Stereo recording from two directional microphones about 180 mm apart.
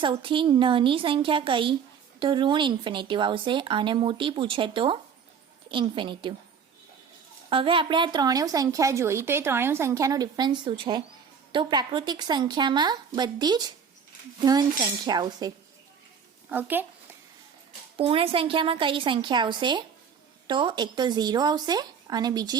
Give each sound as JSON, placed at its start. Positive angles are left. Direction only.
{"t": 0.0, "sound": "a woman's voice", "side_deg": -30}
{"t": 7.5, "sound": "a woman's voice", "side_deg": -30}
{"t": 16.5, "sound": "a sound", "side_deg": -10}
{"t": 17.9, "sound": "a woman's voice", "side_deg": -30}